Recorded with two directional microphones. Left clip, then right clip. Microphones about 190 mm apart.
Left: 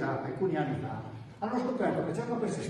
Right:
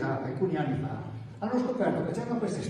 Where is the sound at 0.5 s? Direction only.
Centre (ahead or behind).